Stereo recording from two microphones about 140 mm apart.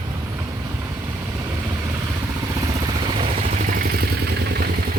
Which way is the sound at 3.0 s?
40° right (ahead or behind).